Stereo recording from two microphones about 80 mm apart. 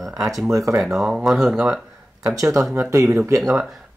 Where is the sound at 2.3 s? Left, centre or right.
Right.